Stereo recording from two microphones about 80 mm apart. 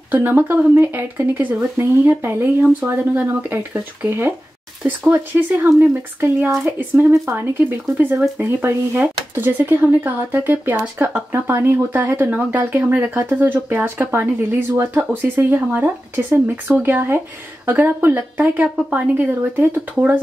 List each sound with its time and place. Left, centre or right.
0.1 s speech: right